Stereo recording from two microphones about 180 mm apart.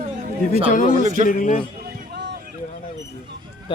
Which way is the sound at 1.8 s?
65° right (ahead or behind).